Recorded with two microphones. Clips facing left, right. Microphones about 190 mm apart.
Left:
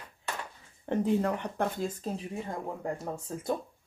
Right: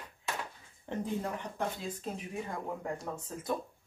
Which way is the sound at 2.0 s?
35° left (ahead or behind).